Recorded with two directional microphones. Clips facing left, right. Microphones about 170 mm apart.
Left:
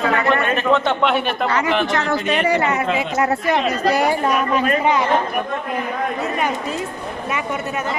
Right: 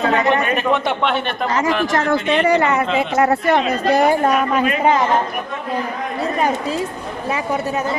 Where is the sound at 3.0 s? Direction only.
55° right (ahead or behind).